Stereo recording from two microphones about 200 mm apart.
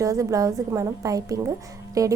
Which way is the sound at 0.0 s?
15° right (ahead or behind).